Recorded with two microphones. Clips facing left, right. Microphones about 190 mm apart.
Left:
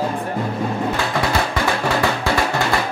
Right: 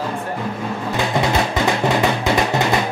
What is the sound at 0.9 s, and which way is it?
Music, 20° right (ahead or behind).